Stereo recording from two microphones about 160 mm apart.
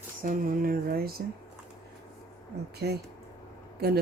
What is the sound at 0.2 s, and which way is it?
Speech, 60° right (ahead or behind).